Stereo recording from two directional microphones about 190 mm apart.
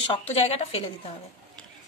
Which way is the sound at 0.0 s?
30° left (ahead or behind).